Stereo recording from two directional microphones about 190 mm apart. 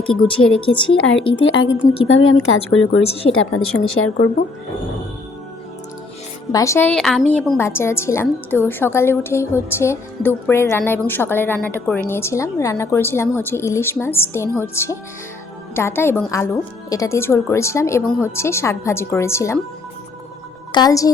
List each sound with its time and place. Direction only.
0.0 s speech: 30° left (ahead or behind)
1.5 s speech: 80° left
3.1 s a woman's voice: 30° left (ahead or behind)
3.3 s speech: 90° left
6.5 s a woman's voice: 15° left (ahead or behind)
7.6 s a woman's voice: 15° left (ahead or behind)
20.7 s speech: 20° left (ahead or behind)